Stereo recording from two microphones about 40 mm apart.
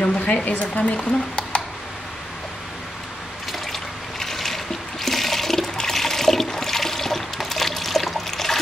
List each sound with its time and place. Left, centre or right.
0.0 s speech: left
3.5 s trickle: centre
5.0 s toilet flush: centre